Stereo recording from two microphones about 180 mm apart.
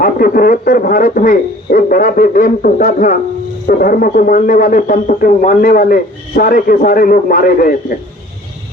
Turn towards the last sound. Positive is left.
turn(degrees=50)  # may be behind; listen again after turning